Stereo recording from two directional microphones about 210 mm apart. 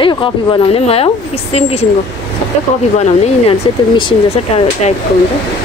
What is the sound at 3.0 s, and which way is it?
Speech, 30° left (ahead or behind).